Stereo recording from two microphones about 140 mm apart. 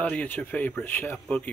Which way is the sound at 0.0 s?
10° left (ahead or behind).